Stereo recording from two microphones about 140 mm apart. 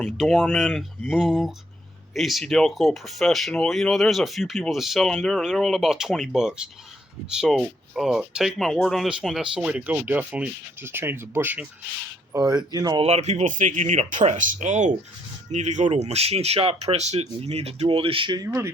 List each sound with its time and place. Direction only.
0.0 s speech: centre (ahead or behind); by 11.6 s 15° right (ahead or behind)
12.3 s speech: 30° right (ahead or behind)
13.0 s speech: 45° right (ahead or behind)
18.4 s speech: 20° right (ahead or behind)